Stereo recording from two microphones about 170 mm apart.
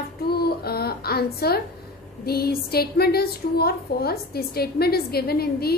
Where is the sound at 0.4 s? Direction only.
65° left (ahead or behind).